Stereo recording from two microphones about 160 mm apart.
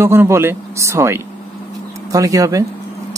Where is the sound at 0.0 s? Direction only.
15° right (ahead or behind).